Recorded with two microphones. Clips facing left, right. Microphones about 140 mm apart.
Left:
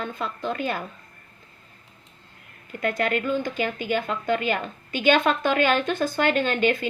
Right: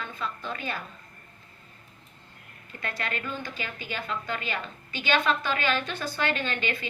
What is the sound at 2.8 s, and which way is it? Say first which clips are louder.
A woman's voice: left 10 dB; 45° left (ahead or behind).